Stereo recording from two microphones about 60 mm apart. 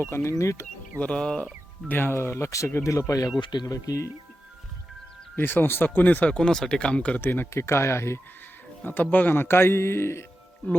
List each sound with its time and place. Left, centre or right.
0.0 s speech: left
0.3 s speech: left
0.9 s insect: centre
1.9 s speech: left
2.5 s speech: left
3.1 s speech: left
3.7 s speech: left
5.4 s speech: left; by 7.2 s centre
7.2 s speech: left
7.5 s speech: left
8.8 s speech: left